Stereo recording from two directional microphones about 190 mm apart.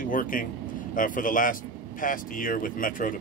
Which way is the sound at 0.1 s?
45° left (ahead or behind).